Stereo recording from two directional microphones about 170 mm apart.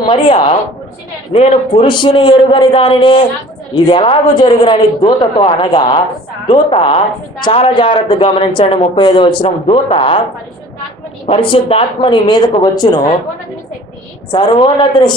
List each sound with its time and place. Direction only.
0.0 s speech: 30° left (ahead or behind)
11.2 s speech: 35° left (ahead or behind)
14.3 s speech: 30° left (ahead or behind)